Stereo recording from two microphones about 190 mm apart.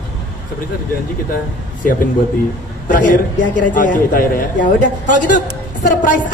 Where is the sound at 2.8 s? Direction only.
45° left (ahead or behind).